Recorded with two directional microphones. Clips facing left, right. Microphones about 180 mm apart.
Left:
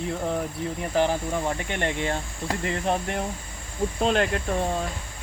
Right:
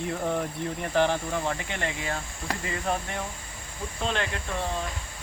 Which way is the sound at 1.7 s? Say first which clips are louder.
Left 4 dB; 60° left (ahead or behind).